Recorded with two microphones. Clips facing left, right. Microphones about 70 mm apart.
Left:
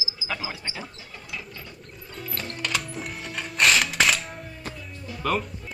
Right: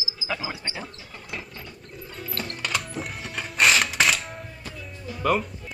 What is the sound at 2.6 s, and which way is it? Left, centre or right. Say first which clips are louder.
Music: even; centre.